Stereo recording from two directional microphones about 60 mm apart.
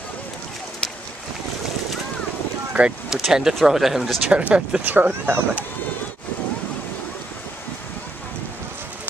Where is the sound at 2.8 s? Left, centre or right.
Centre.